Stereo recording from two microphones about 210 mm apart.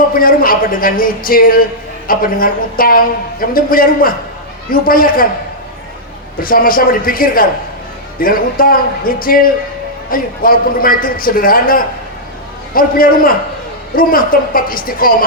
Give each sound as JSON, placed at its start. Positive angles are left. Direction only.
{"t": 0.1, "sound": "a woman's voice", "side_deg": 45}
{"t": 6.4, "sound": "a woman's voice", "side_deg": 45}